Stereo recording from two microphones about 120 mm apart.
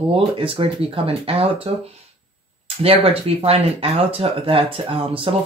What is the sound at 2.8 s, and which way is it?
Speech, 55° right (ahead or behind).